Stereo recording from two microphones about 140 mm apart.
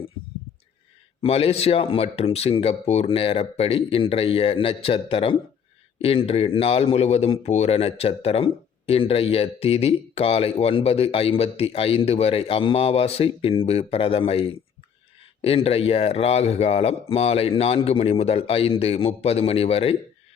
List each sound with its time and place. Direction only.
1.2 s speech: 45° left (ahead or behind)